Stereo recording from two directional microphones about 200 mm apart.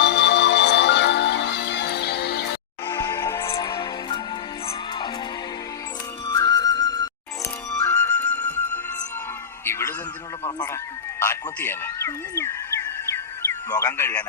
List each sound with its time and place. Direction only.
0.0 s music: 60° left (ahead or behind)
2.8 s music: 15° left (ahead or behind)
6.2 s music: 20° left (ahead or behind)
7.8 s flute: 15° left (ahead or behind)
9.6 s music: 15° left (ahead or behind)
11.2 s a sound: 10° left (ahead or behind)
13.7 s a man's voice: 15° left (ahead or behind)